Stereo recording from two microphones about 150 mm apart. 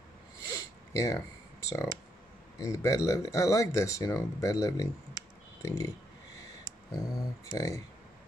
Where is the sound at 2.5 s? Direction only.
20° left (ahead or behind).